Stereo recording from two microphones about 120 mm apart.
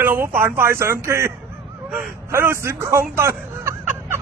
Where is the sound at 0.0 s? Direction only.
20° right (ahead or behind).